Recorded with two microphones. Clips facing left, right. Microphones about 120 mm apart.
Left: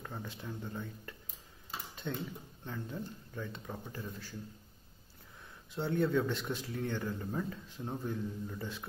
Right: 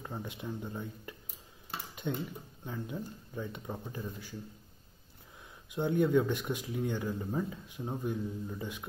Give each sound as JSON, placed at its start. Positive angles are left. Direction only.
{"t": 0.0, "sound": "speech", "side_deg": -15}
{"t": 5.7, "sound": "speech", "side_deg": -15}